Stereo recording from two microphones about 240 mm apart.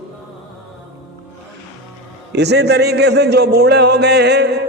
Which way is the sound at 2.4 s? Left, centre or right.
Right.